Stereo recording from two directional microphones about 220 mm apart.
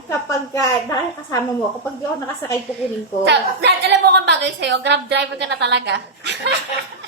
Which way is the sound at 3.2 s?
50° right (ahead or behind).